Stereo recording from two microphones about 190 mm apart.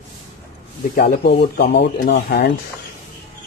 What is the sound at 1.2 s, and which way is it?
Speech, 55° left (ahead or behind).